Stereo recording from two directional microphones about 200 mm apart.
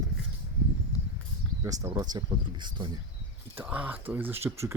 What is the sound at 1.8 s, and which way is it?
Speech, 20° right (ahead or behind).